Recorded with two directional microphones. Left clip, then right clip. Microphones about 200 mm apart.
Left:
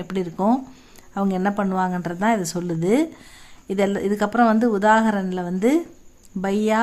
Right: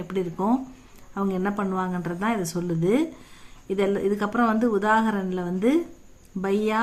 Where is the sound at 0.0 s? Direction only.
35° left (ahead or behind).